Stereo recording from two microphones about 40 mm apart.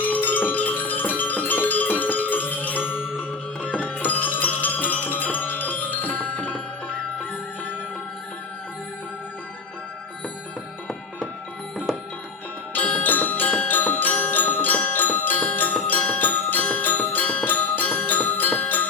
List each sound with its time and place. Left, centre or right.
0.0 s music: left
11.9 s music: centre
12.7 s music: left